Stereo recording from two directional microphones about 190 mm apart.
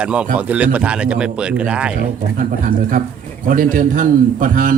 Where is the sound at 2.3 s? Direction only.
45° right (ahead or behind).